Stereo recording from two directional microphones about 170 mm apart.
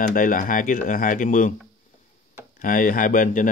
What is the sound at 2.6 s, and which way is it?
Speech, 55° left (ahead or behind).